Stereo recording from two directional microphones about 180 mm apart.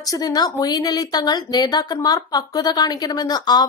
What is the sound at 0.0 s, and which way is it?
A woman's voice, 20° left (ahead or behind).